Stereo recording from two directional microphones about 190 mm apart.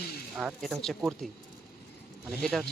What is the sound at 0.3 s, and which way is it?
Speech, centre (ahead or behind).